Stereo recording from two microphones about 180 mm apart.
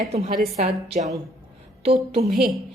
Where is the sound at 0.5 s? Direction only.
40° right (ahead or behind).